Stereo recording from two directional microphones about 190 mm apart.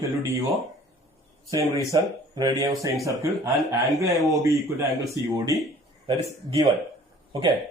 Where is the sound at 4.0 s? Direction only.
15° right (ahead or behind).